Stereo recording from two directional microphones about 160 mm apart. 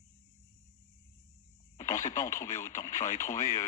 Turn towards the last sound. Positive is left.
turn(degrees=20)  # may be behind; listen again after turning